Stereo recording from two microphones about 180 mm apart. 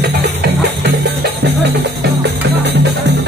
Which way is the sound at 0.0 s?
70° right (ahead or behind).